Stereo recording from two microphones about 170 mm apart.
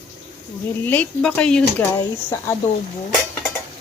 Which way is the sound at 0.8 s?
10° left (ahead or behind).